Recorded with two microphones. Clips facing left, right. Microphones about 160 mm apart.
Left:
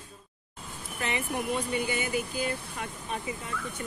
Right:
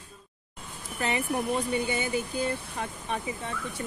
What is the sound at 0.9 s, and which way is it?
Speech, 35° right (ahead or behind).